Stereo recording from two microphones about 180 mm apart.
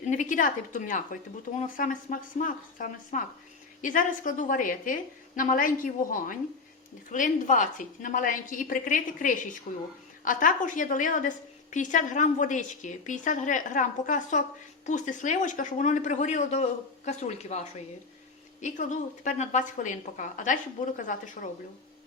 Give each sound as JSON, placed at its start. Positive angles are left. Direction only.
{"t": 0.1, "sound": "a woman's voice", "side_deg": 45}